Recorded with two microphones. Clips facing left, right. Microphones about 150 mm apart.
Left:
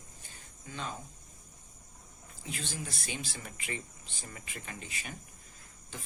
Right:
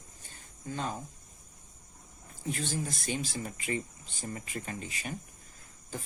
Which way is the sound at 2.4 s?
40° right (ahead or behind).